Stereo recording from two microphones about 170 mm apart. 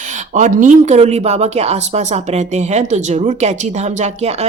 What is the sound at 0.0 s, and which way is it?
Speech, 45° right (ahead or behind).